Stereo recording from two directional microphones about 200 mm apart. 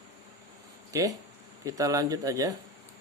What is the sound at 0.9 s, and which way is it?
Speech, 15° right (ahead or behind).